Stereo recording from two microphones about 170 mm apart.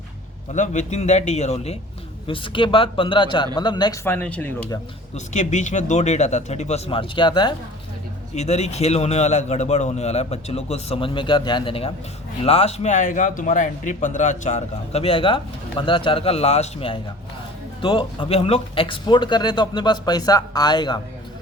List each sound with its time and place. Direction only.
0.5 s a man's voice: 45° left (ahead or behind); by 4.0 s 25° left (ahead or behind)
4.0 s speech: 10° left (ahead or behind)
5.1 s a man's voice: 45° left (ahead or behind); by 7.5 s 25° left (ahead or behind)
8.4 s a man's voice: 40° left (ahead or behind)